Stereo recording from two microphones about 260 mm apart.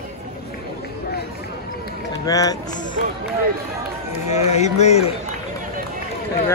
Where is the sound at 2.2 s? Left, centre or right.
Centre.